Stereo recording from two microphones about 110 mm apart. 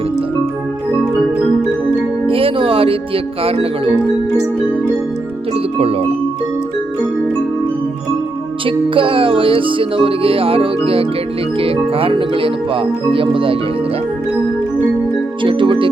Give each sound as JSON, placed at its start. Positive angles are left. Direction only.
{"t": 2.2, "sound": "music", "side_deg": -55}
{"t": 3.4, "sound": "speech", "side_deg": -60}
{"t": 8.6, "sound": "speech", "side_deg": -55}
{"t": 15.4, "sound": "music", "side_deg": -50}